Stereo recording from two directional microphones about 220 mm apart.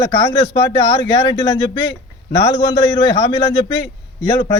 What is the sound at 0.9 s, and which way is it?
A man's voice, 25° left (ahead or behind).